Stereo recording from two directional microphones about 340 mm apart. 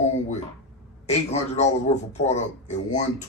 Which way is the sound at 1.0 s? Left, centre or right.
Centre.